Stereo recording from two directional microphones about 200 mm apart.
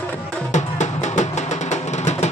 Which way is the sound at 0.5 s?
35° left (ahead or behind).